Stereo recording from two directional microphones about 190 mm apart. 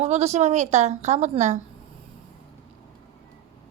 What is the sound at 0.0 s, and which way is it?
A woman's voice, 35° right (ahead or behind).